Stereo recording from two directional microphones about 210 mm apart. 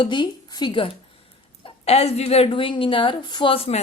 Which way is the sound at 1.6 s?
30° left (ahead or behind).